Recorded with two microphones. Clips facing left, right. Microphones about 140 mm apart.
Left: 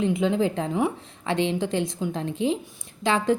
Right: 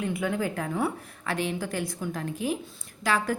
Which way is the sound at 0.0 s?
20° left (ahead or behind).